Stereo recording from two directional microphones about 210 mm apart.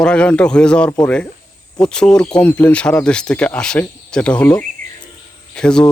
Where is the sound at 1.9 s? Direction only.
5° left (ahead or behind).